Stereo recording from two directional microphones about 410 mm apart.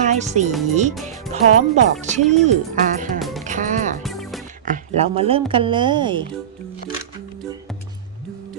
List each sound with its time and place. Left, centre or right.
0.0 s speech: centre
3.2 s music: centre
3.4 s music: centre
4.0 s music: centre
4.6 s speech: centre